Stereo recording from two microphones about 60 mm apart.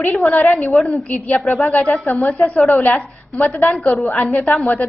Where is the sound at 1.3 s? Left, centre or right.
Centre.